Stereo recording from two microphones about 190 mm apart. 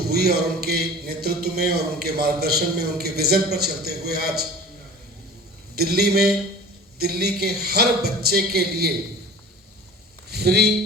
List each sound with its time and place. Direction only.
0.1 s a man's voice: 55° right (ahead or behind)
5.7 s a man's voice: 55° right (ahead or behind)
10.2 s speech: 60° right (ahead or behind)